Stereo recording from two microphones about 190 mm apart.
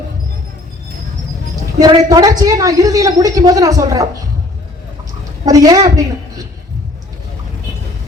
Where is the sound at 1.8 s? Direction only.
20° right (ahead or behind).